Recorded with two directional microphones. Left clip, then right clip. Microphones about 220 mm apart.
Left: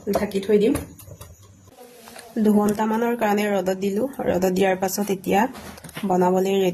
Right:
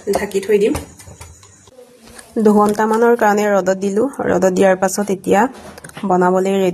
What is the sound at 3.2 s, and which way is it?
Speech, 90° left.